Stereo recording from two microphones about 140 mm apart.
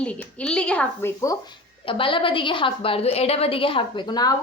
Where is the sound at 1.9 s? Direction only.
40° left (ahead or behind).